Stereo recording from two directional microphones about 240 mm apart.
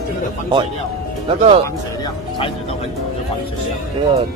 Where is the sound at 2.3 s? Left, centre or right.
Left.